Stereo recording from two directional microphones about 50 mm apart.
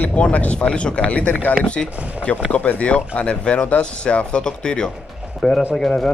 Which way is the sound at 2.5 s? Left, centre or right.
Left.